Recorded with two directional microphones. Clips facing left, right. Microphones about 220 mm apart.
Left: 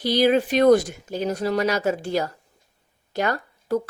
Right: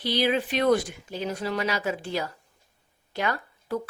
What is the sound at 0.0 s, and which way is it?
A woman's voice, 45° left (ahead or behind).